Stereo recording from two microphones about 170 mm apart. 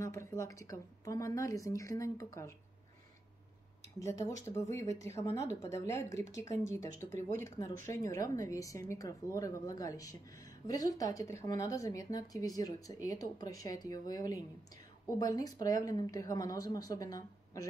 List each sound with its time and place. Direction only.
0.0 s speech: 15° left (ahead or behind)
4.0 s speech: 15° left (ahead or behind)